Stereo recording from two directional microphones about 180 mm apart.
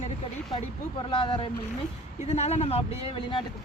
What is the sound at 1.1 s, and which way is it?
A woman's voice, 30° left (ahead or behind).